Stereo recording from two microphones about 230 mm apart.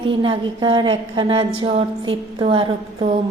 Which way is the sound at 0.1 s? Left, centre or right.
Right.